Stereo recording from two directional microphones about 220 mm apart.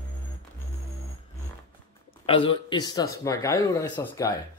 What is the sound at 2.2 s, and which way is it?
Speech, 25° left (ahead or behind).